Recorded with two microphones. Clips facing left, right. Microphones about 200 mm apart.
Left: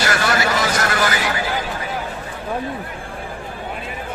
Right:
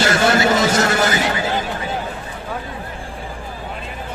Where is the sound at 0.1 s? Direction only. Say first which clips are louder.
Right 4 dB; 25° right (ahead or behind).